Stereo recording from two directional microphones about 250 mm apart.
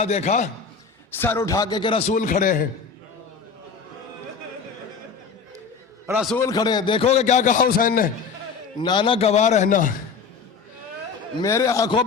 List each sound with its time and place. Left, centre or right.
0.0 s a man's voice: left
1.1 s a man's voice: centre; by 2.6 s left
6.1 s a man's voice: centre
6.3 s a man's voice: centre; by 8.1 s left
8.8 s a man's voice: centre
11.3 s a man's voice: centre